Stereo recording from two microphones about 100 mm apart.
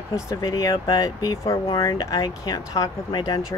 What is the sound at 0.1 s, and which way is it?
Speech, 40° left (ahead or behind).